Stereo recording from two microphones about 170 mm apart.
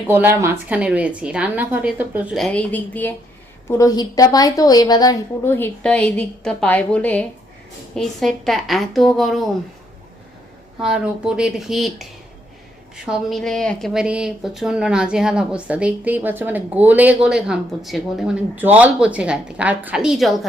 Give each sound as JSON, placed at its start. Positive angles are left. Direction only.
{"t": 0.1, "sound": "a woman's voice", "side_deg": -15}
{"t": 10.8, "sound": "a woman's voice", "side_deg": -5}
{"t": 13.1, "sound": "a woman's voice", "side_deg": 0}